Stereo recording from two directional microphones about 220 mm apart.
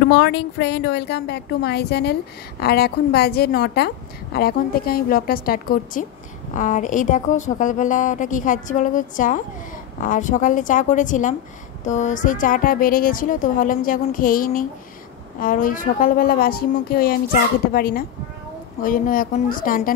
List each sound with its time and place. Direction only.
0.1 s a woman's voice: 50° left (ahead or behind)